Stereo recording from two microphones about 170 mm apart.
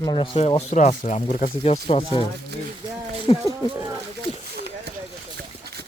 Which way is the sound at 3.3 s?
30° left (ahead or behind).